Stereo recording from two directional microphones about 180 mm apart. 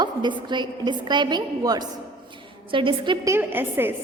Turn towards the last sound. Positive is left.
turn(degrees=-10)  # may be behind; listen again after turning